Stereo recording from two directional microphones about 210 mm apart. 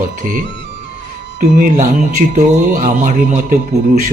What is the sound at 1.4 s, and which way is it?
Speech, 35° right (ahead or behind).